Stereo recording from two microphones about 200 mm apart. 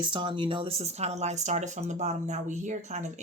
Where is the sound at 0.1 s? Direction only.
25° right (ahead or behind).